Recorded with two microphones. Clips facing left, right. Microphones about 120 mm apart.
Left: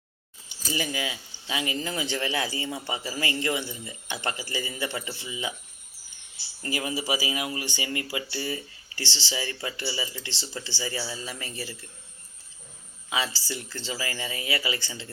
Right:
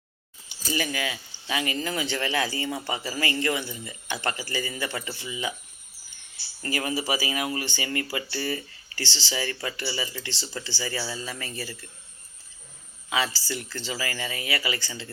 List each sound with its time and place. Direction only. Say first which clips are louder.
0.7 s speech: right 2 dB; 20° left (ahead or behind)
6.6 s speech: right 2 dB; 10° left (ahead or behind)
13.1 s speech: right 2 dB; 20° left (ahead or behind)